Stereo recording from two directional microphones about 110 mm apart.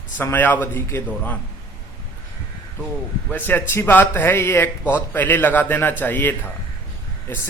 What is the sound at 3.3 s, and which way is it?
A man's voice, 15° left (ahead or behind).